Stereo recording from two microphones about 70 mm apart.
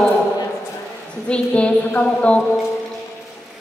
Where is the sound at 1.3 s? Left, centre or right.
Centre.